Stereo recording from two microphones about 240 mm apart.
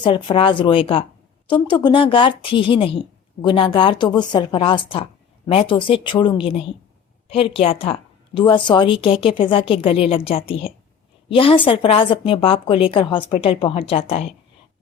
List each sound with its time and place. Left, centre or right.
0.0 s a woman's voice: centre